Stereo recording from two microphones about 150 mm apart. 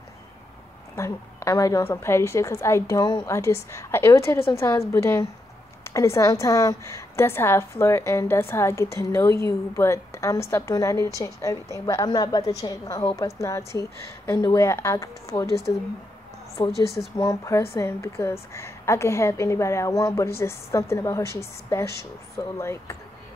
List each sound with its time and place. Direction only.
0.9 s a woman's voice: 20° left (ahead or behind)
16.6 s speech: 35° left (ahead or behind)
17.2 s a woman's voice: 20° left (ahead or behind)